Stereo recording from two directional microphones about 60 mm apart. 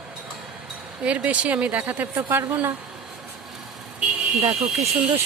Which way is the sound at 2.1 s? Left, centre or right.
Right.